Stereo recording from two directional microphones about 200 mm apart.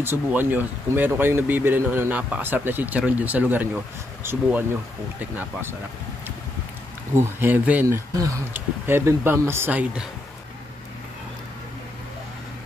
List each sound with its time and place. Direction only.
0.0 s speech: 10° right (ahead or behind)
7.2 s speech: 10° right (ahead or behind)